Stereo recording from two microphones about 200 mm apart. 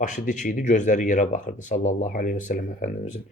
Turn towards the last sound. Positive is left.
turn(degrees=40)  # may be behind; listen again after turning